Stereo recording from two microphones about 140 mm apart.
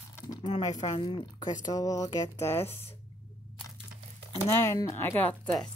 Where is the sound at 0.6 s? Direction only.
25° left (ahead or behind).